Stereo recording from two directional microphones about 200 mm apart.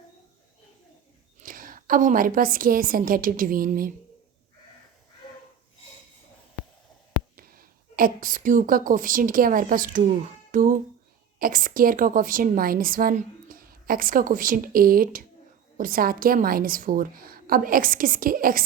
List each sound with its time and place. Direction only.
1.4 s a woman's voice: 45° right (ahead or behind)
7.3 s a woman's voice: 45° right (ahead or behind)